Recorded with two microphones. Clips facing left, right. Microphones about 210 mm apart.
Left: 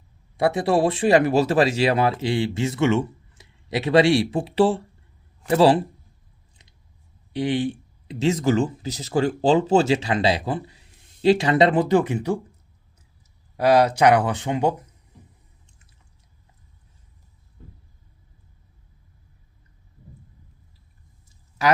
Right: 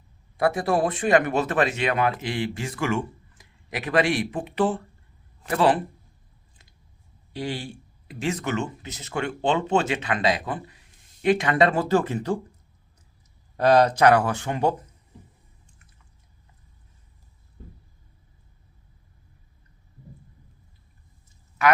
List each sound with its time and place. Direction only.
0.3 s speech: 25° left (ahead or behind)
7.3 s speech: 20° left (ahead or behind)
13.6 s speech: 10° left (ahead or behind)